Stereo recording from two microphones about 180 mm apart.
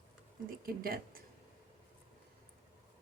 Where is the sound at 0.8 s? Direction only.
55° right (ahead or behind).